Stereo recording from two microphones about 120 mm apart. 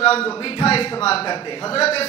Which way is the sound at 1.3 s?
40° left (ahead or behind).